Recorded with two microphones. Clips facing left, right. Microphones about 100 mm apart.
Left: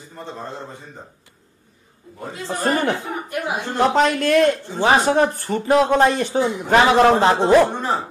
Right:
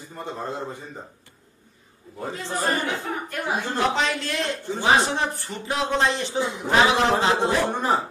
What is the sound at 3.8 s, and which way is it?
Speech, 50° left (ahead or behind).